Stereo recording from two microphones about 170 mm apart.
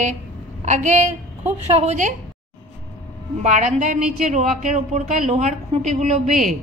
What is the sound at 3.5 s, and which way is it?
Speech, 50° right (ahead or behind).